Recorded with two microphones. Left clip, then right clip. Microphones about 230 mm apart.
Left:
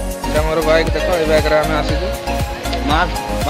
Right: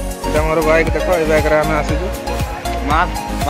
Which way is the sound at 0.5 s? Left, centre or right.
Centre.